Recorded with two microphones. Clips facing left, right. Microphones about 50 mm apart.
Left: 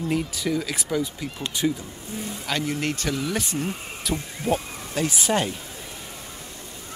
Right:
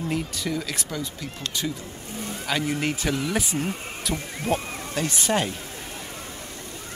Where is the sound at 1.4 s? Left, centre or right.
Centre.